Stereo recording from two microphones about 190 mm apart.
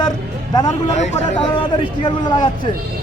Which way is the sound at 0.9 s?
35° left (ahead or behind).